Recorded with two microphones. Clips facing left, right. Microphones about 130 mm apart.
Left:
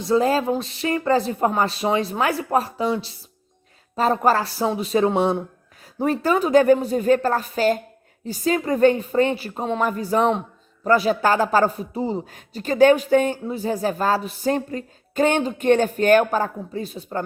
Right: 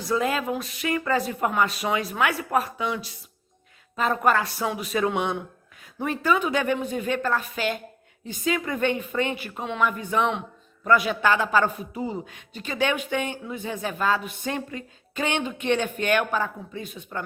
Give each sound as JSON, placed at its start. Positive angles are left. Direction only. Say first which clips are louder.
{"t": 0.0, "sound": "a man's voice", "louder": "left 6 dB", "side_deg": 30}